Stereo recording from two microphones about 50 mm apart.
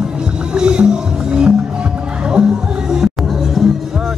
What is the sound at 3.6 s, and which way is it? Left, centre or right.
Music, centre.